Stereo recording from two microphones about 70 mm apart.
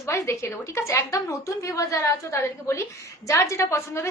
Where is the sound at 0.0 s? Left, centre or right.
Left.